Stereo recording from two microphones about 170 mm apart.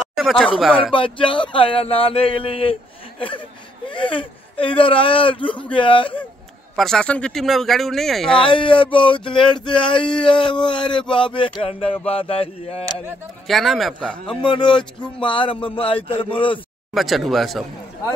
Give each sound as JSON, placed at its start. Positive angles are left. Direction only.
{"t": 0.1, "sound": "a sound", "side_deg": 0}
{"t": 0.6, "sound": "speech", "side_deg": 0}
{"t": 0.9, "sound": "speech", "side_deg": 30}
{"t": 5.7, "sound": "a sound", "side_deg": 30}
{"t": 6.8, "sound": "speech", "side_deg": 5}
{"t": 8.4, "sound": "speech", "side_deg": 30}
{"t": 8.9, "sound": "a sound", "side_deg": 30}
{"t": 12.1, "sound": "speech", "side_deg": 35}
{"t": 13.5, "sound": "speech", "side_deg": 0}
{"t": 14.2, "sound": "a sound", "side_deg": 30}
{"t": 15.1, "sound": "speech", "side_deg": 30}
{"t": 16.9, "sound": "speech", "side_deg": 0}